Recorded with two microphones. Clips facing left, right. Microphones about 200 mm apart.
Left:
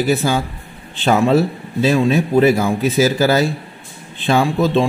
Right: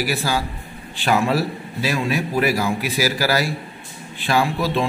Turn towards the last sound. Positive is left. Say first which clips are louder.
# left 5 dB
turn(degrees=25)  # may be behind; listen again after turning